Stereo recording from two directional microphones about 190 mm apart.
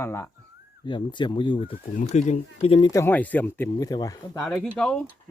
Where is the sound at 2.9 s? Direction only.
10° left (ahead or behind).